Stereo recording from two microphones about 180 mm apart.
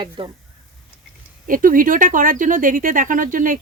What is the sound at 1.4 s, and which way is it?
A woman's voice, 50° right (ahead or behind).